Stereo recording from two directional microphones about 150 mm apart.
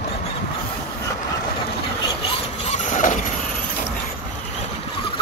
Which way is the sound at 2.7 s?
60° left (ahead or behind).